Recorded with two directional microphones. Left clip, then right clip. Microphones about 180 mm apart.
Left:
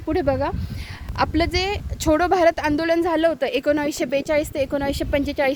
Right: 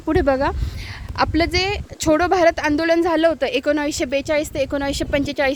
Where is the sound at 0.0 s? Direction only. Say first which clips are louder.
Right 4 dB; 15° right (ahead or behind).